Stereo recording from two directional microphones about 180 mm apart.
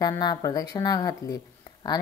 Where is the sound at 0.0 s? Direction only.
20° left (ahead or behind).